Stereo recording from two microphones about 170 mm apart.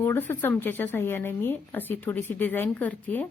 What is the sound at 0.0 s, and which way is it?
Speech, 15° left (ahead or behind).